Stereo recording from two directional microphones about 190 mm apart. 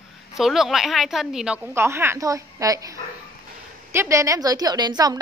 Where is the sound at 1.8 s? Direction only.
15° right (ahead or behind).